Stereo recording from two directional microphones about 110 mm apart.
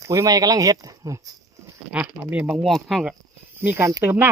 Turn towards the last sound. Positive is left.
turn(degrees=-20)  # may be behind; listen again after turning